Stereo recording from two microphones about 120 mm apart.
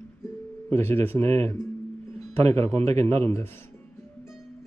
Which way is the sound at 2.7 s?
65° right (ahead or behind).